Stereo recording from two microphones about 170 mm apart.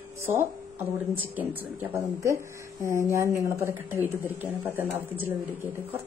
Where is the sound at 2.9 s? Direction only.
15° right (ahead or behind).